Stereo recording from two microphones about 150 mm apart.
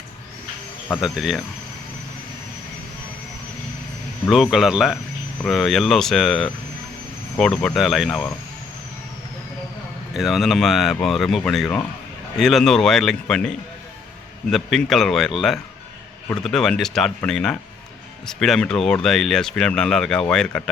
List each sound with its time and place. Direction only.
0.9 s speech: 5° right (ahead or behind)
4.3 s speech: centre (ahead or behind)
10.2 s speech: centre (ahead or behind)
14.5 s speech: centre (ahead or behind)